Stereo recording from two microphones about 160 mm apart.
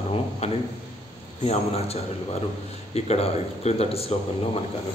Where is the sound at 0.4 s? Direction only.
40° left (ahead or behind).